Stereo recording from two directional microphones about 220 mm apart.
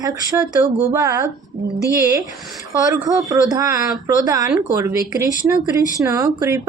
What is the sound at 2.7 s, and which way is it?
A woman's voice, 15° right (ahead or behind).